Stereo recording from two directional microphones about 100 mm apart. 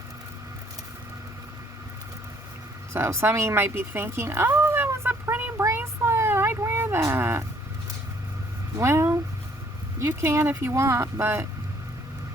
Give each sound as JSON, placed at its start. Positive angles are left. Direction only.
{"t": 2.9, "sound": "speech", "side_deg": -25}
{"t": 5.6, "sound": "a sound", "side_deg": -25}
{"t": 8.8, "sound": "speech", "side_deg": -25}